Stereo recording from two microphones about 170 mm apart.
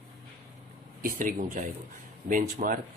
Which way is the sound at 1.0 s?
55° right (ahead or behind).